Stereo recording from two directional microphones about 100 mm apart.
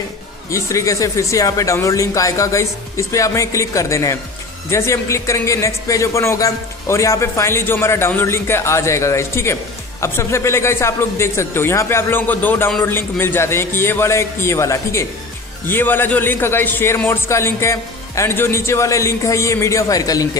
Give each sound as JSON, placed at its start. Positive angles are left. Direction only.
{"t": 0.5, "sound": "speech", "side_deg": 30}
{"t": 15.6, "sound": "speech", "side_deg": 20}